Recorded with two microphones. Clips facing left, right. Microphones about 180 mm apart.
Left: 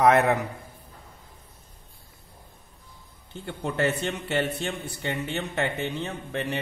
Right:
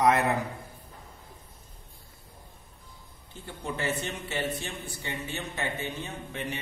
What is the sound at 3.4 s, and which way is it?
A man's voice, 70° left (ahead or behind).